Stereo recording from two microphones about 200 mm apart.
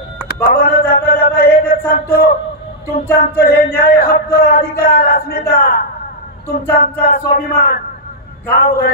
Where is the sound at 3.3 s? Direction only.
50° left (ahead or behind).